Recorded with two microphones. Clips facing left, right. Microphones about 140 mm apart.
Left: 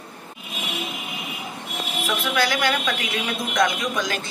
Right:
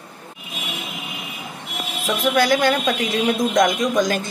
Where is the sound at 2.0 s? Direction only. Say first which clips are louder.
Right 5 dB; 45° right (ahead or behind).